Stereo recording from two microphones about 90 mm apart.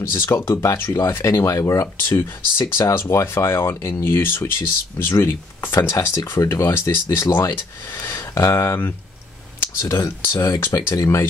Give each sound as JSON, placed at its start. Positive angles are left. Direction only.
{"t": 0.0, "sound": "speech", "side_deg": 30}